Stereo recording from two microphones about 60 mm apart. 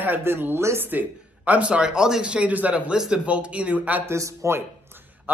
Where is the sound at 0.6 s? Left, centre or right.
Right.